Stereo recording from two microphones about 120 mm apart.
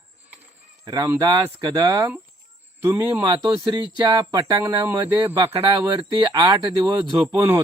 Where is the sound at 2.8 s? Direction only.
15° right (ahead or behind).